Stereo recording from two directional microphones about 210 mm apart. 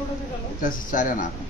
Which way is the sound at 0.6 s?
40° left (ahead or behind).